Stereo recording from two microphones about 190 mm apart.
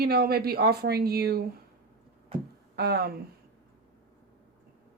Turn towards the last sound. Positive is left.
turn(degrees=-55)  # may be behind; listen again after turning